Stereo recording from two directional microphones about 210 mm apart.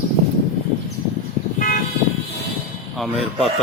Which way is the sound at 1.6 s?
40° left (ahead or behind).